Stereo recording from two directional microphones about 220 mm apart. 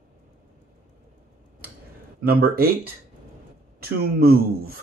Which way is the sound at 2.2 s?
45° right (ahead or behind).